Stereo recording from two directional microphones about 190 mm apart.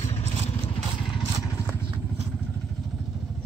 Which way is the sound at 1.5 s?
15° left (ahead or behind).